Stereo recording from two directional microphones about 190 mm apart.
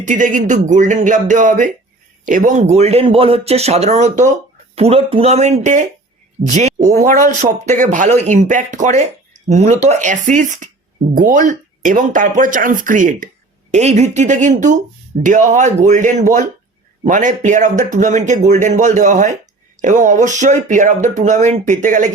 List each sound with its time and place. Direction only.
0.0 s speech: 40° right (ahead or behind)